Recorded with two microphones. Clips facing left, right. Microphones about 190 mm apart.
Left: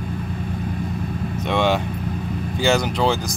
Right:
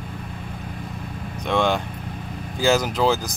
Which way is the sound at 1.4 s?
5° left (ahead or behind).